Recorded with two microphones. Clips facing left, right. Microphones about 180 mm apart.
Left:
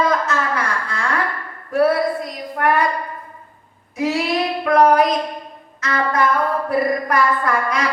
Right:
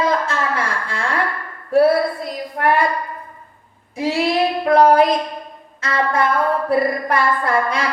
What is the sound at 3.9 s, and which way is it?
Speech, 30° right (ahead or behind).